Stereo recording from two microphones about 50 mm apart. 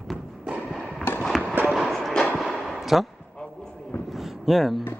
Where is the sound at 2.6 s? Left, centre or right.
Centre.